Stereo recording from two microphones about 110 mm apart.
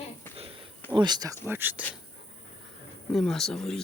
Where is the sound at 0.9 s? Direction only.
40° right (ahead or behind).